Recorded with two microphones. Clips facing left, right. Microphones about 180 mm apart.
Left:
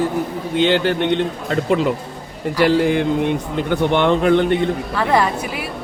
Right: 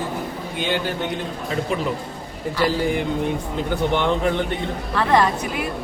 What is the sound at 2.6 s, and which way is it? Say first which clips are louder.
A man's voice: left 6 dB; 90° left.